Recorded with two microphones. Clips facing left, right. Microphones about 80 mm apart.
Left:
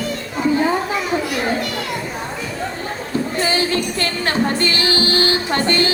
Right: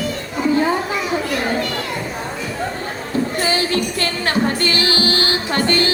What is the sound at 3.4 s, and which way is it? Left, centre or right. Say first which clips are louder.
Music: even; left.